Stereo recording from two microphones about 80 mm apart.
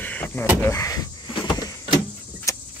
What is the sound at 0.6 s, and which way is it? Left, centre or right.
Speech, left.